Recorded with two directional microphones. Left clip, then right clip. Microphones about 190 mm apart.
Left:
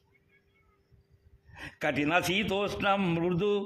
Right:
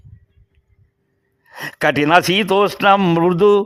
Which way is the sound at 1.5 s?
55° right (ahead or behind).